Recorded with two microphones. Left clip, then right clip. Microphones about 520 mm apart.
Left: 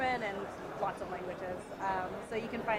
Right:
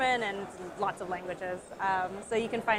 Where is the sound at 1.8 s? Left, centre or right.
Right.